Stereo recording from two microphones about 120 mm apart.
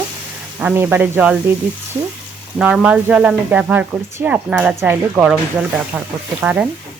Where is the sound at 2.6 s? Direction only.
10° right (ahead or behind).